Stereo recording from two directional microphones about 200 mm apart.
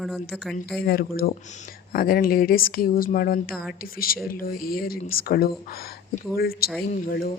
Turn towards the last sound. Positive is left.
turn(degrees=50)  # may be behind; listen again after turning